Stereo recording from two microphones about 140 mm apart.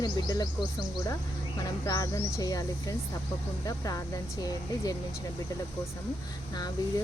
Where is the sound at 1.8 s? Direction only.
25° left (ahead or behind).